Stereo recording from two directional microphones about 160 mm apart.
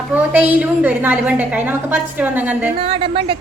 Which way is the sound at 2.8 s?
35° right (ahead or behind).